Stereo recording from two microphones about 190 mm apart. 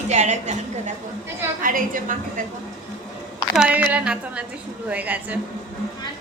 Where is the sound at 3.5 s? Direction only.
5° right (ahead or behind).